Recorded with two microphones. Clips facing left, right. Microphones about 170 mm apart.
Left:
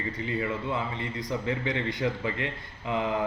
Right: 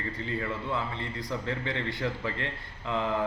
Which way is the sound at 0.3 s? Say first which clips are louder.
Left 3 dB; 15° left (ahead or behind).